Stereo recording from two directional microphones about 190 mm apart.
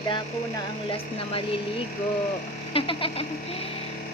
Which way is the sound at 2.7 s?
30° left (ahead or behind).